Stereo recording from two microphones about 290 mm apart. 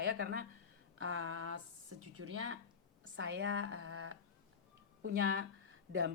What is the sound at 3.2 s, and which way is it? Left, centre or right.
A woman's voice, right.